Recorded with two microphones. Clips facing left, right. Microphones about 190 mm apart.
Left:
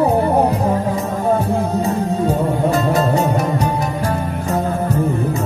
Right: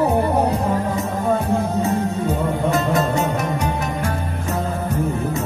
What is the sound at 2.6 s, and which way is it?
Music, 35° left (ahead or behind).